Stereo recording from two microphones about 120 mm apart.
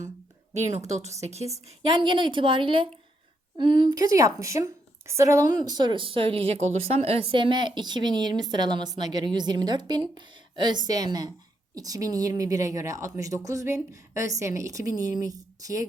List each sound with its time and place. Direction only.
0.5 s a woman's voice: 70° right (ahead or behind)
2.0 s a woman's voice: 40° right (ahead or behind); by 5.5 s 25° right (ahead or behind)
5.5 s a woman's voice: 35° right (ahead or behind)